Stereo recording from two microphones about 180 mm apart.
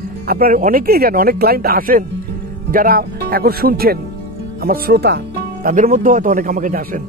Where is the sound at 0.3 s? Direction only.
55° right (ahead or behind).